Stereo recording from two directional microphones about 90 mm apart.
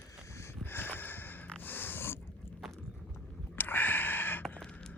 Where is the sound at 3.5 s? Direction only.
20° left (ahead or behind).